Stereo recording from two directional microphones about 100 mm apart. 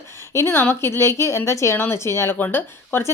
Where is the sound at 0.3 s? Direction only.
25° left (ahead or behind).